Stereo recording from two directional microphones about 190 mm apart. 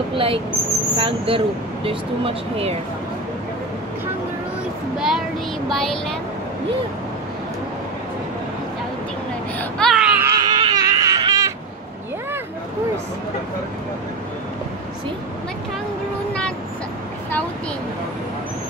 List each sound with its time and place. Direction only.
0.1 s speech: 30° right (ahead or behind)
4.9 s child singing: 5° right (ahead or behind)
5.7 s speech: centre (ahead or behind)
9.6 s baby cry: centre (ahead or behind)
10.4 s baby cry: 25° right (ahead or behind)